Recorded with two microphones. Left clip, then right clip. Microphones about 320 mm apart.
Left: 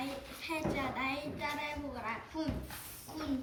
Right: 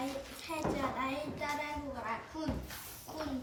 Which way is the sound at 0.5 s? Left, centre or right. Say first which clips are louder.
Even; centre.